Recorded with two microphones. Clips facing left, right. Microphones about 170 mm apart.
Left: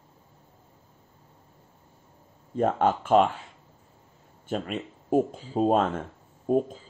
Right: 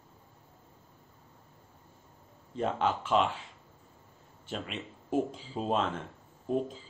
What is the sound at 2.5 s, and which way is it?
Speech, 45° left (ahead or behind).